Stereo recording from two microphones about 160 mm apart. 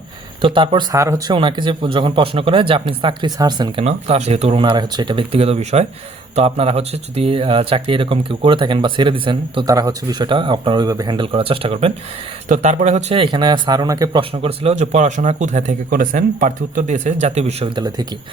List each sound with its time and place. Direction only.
0.4 s speech: 30° right (ahead or behind)
0.9 s speech: 20° right (ahead or behind)
1.3 s speech: 30° right (ahead or behind)
3.8 s speech: 40° right (ahead or behind)
12.5 s speech: 45° right (ahead or behind)
13.3 s speech: 25° right (ahead or behind)
14.2 s speech: 35° right (ahead or behind)